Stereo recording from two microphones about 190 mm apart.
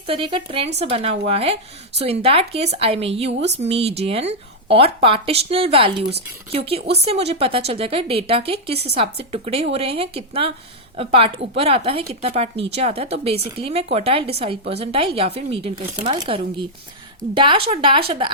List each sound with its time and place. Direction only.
0.1 s a woman's voice: 25° right (ahead or behind)